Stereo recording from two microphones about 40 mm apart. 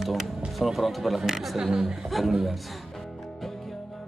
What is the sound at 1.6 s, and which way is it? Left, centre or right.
Speech, centre.